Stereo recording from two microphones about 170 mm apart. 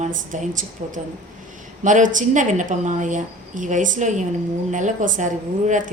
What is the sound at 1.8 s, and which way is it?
A woman's voice, 50° right (ahead or behind).